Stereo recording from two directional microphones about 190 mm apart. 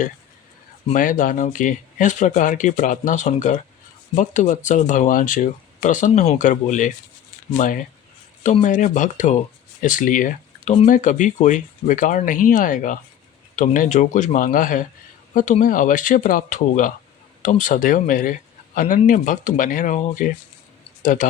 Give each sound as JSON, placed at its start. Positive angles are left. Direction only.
{"t": 0.9, "sound": "speech", "side_deg": 45}